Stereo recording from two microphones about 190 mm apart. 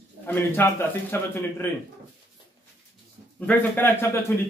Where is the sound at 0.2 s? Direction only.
10° left (ahead or behind).